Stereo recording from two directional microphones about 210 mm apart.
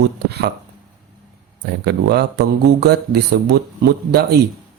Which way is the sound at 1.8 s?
50° right (ahead or behind).